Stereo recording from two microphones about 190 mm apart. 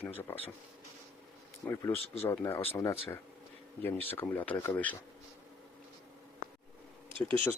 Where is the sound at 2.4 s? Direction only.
10° left (ahead or behind).